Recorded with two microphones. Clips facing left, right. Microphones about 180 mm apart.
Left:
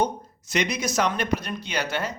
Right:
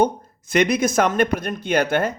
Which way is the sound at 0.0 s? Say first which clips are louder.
Right 6 dB; 55° right (ahead or behind).